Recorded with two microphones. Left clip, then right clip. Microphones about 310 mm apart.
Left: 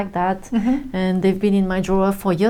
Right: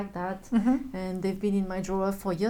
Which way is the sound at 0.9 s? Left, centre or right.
Left.